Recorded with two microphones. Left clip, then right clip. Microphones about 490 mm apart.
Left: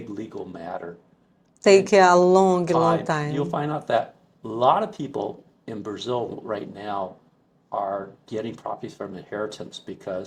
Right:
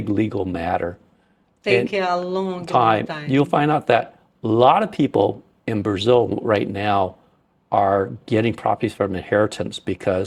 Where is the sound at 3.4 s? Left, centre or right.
Right.